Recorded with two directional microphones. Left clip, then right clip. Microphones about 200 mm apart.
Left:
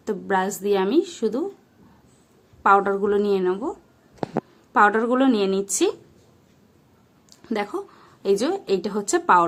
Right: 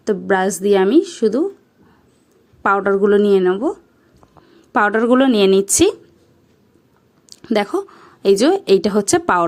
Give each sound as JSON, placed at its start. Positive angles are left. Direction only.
{"t": 0.0, "sound": "a woman's voice", "side_deg": -30}
{"t": 2.6, "sound": "a woman's voice", "side_deg": -30}
{"t": 7.3, "sound": "a woman's voice", "side_deg": -40}